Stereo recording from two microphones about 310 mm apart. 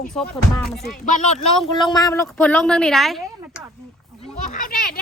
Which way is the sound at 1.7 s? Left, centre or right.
Centre.